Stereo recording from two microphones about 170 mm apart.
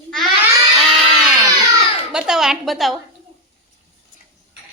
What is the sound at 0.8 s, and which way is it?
Crowd, centre (ahead or behind).